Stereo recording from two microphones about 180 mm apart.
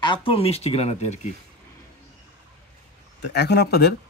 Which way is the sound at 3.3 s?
65° left (ahead or behind).